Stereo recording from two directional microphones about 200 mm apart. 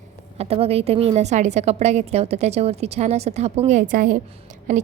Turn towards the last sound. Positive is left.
turn(degrees=-40)  # may be behind; listen again after turning